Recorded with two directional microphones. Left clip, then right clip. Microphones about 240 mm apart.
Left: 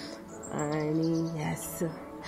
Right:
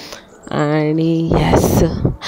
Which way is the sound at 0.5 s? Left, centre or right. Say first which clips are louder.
Right 15 dB; right.